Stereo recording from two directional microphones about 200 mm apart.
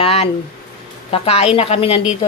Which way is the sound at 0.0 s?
30° left (ahead or behind).